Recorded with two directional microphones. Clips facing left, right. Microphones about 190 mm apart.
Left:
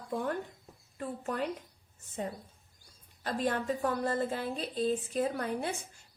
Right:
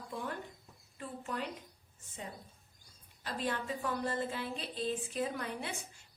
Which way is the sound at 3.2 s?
45° left (ahead or behind).